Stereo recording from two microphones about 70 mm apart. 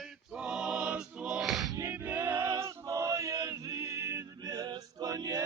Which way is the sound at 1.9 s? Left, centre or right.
Right.